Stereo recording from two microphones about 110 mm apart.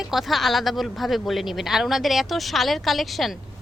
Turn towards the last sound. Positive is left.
turn(degrees=0)  # may be behind; listen again after turning